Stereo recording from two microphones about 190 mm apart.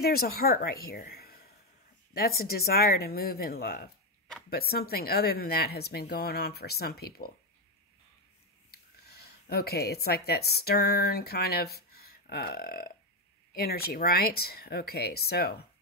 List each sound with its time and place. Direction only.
0.0 s a woman's voice: 55° left (ahead or behind)
8.7 s a woman's voice: 55° left (ahead or behind)